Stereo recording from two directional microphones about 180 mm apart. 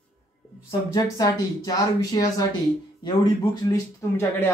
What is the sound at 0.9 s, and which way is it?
Speech, 20° left (ahead or behind).